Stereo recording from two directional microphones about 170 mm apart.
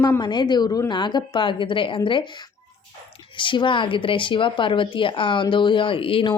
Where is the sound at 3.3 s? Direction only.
30° left (ahead or behind).